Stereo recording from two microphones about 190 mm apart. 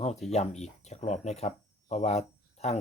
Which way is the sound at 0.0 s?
35° left (ahead or behind).